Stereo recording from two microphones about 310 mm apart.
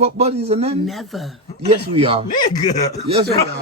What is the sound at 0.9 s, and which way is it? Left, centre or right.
Speech, centre.